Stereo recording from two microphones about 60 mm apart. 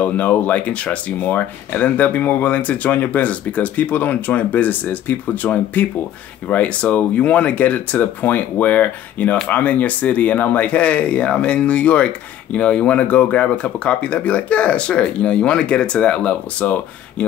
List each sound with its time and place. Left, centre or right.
0.0 s speech: left